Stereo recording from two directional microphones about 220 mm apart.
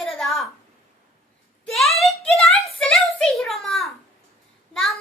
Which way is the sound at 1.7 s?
Centre (ahead or behind).